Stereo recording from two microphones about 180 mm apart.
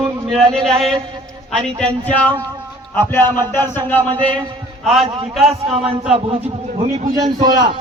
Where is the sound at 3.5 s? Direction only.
10° left (ahead or behind).